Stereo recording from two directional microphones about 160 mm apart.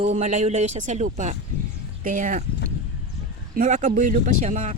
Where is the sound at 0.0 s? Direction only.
45° right (ahead or behind).